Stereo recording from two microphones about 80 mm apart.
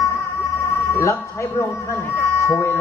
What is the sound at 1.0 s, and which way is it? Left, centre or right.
A man's voice, left.